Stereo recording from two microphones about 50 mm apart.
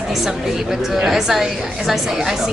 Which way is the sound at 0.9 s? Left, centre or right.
Centre.